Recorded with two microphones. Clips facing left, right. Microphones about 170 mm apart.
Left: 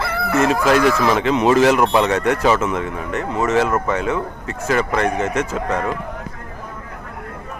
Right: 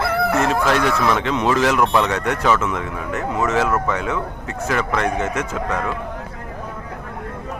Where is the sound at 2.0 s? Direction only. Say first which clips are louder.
Left 3 dB; centre (ahead or behind).